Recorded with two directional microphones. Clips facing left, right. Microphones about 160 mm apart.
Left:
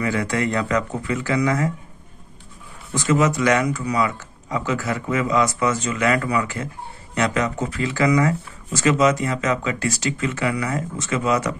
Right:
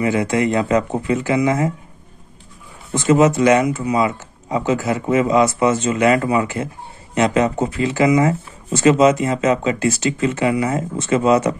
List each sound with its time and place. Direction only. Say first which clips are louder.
0.0 s speech: right 5 dB; 20° right (ahead or behind)
2.9 s speech: right 5 dB; 25° right (ahead or behind)